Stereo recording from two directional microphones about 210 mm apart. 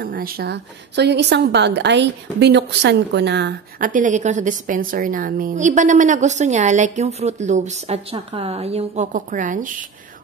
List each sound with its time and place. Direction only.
0.0 s a woman's voice: 45° right (ahead or behind)